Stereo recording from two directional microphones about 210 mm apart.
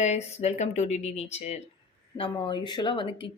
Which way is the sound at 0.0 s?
30° left (ahead or behind).